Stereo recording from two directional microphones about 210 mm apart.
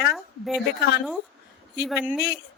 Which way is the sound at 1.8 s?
5° right (ahead or behind).